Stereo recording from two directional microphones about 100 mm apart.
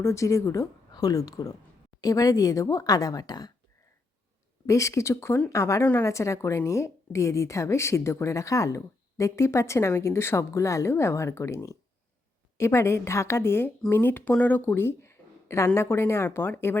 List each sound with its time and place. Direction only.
0.0 s speech: 30° left (ahead or behind)
4.6 s a woman's voice: 30° left (ahead or behind)